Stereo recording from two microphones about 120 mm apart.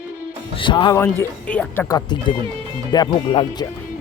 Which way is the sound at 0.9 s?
20° left (ahead or behind).